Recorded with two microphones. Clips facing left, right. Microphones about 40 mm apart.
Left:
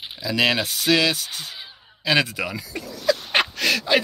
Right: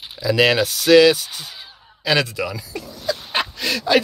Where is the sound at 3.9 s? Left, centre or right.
Centre.